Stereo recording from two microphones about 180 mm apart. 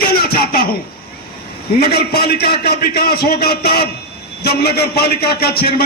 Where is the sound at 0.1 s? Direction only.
55° left (ahead or behind).